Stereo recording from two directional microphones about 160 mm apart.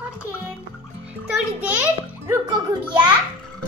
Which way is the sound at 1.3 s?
10° right (ahead or behind).